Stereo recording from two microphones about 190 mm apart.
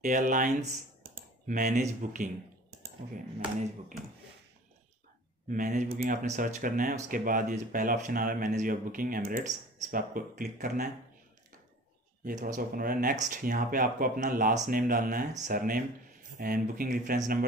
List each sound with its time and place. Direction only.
0.0 s speech: 40° right (ahead or behind)
5.5 s speech: 40° right (ahead or behind)
12.3 s speech: 40° right (ahead or behind)